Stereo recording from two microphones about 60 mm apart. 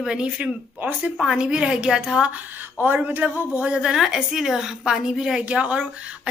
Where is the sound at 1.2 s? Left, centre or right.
Centre.